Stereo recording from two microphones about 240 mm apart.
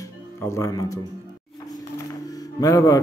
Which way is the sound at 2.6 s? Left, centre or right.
Centre.